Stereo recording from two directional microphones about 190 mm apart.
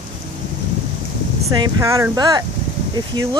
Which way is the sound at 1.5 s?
20° right (ahead or behind).